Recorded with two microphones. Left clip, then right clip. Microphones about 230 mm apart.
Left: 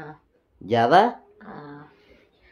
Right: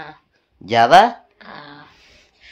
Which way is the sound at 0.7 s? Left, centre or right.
Right.